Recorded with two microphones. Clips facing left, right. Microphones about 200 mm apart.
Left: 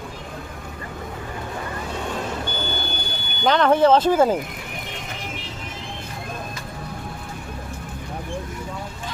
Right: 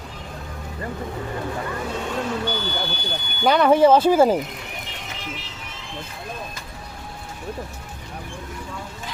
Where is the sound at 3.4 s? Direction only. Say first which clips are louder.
Right 1 dB; 10° right (ahead or behind).